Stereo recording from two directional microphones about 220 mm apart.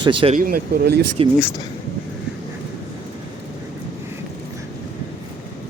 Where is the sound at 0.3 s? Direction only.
40° right (ahead or behind).